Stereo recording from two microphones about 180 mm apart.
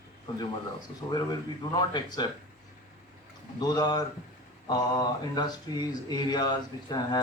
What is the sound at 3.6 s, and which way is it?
Speech, 20° left (ahead or behind).